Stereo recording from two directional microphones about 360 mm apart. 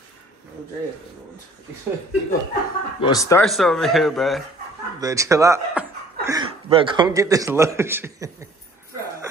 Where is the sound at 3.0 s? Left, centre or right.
Centre.